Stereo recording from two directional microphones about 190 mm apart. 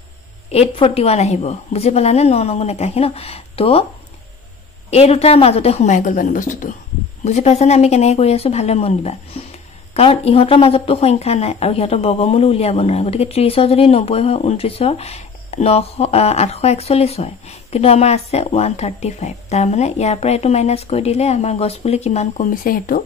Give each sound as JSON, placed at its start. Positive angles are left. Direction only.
{"t": 0.5, "sound": "speech", "side_deg": 30}
{"t": 4.9, "sound": "speech", "side_deg": 30}